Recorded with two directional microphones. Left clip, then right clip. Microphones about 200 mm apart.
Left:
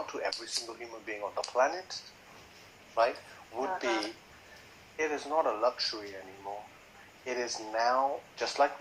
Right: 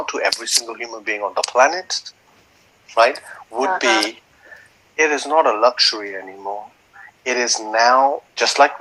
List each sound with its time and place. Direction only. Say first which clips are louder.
0.0 s speech: right 15 dB; 45° right (ahead or behind)